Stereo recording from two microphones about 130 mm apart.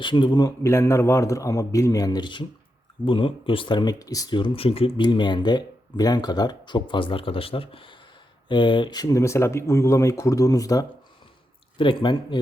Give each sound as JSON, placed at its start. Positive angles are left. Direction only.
{"t": 0.0, "sound": "speech", "side_deg": 40}
{"t": 4.4, "sound": "speech", "side_deg": 45}
{"t": 11.8, "sound": "speech", "side_deg": 40}